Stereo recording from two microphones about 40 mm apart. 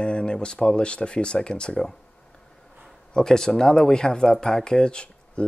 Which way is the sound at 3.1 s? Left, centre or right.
Centre.